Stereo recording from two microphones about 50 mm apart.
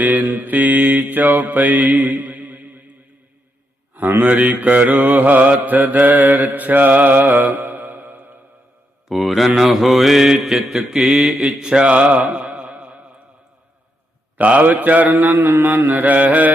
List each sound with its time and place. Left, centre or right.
0.0 s mantra: right
4.2 s mantra: right
9.0 s mantra: centre; by 13.1 s right
14.3 s mantra: right
15.3 s mantra: right